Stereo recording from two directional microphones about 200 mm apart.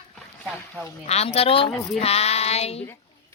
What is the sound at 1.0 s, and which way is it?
A woman's voice, 30° left (ahead or behind).